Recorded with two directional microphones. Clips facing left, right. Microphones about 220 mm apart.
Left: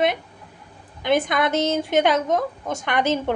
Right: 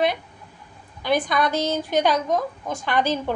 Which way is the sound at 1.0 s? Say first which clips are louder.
Left 1 dB; 20° left (ahead or behind).